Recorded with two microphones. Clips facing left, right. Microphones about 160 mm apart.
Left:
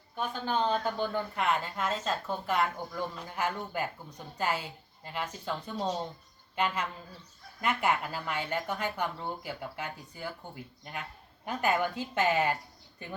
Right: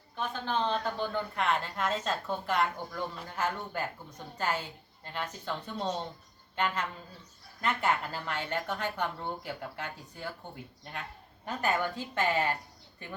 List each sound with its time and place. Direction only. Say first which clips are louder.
0.2 s a woman's voice: left 1 dB; 10° left (ahead or behind)
7.6 s speech: left 1 dB; 10° left (ahead or behind)